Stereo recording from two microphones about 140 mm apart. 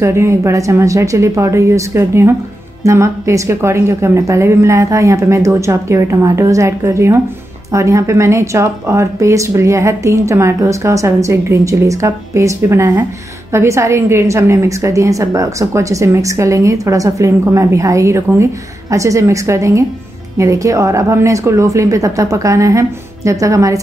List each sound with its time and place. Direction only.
0.0 s a woman's voice: 20° right (ahead or behind)